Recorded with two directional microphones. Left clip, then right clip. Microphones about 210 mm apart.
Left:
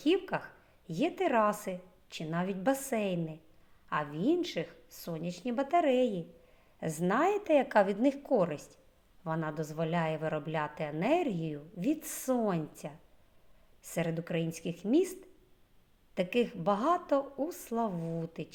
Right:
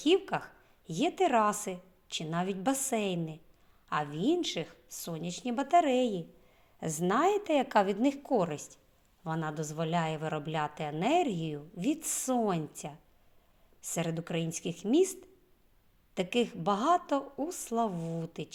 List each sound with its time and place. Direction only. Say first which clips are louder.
0.0 s speech: right 2 dB; 35° right (ahead or behind)